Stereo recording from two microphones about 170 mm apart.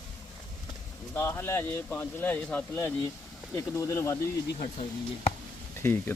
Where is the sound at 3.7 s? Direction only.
15° left (ahead or behind).